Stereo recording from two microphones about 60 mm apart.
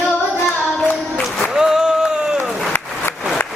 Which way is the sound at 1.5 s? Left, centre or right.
Centre.